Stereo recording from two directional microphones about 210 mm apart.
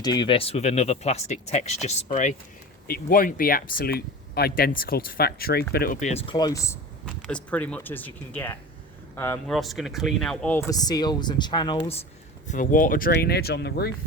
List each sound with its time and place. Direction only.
0.0 s speech: 20° left (ahead or behind)
2.8 s speech: 45° left (ahead or behind); by 6.7 s 15° left (ahead or behind)
7.0 s speech: centre (ahead or behind); by 12.0 s 25° left (ahead or behind)
12.5 s speech: 40° left (ahead or behind)